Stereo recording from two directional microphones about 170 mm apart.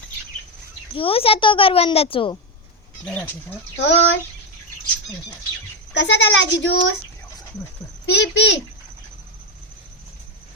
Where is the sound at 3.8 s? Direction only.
90° left.